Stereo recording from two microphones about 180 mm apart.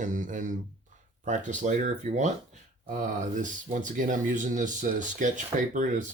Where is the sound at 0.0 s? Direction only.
45° right (ahead or behind).